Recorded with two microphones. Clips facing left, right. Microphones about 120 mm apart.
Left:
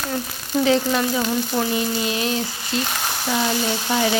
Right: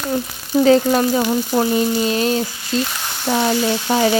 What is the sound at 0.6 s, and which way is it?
Frying, 40° right (ahead or behind).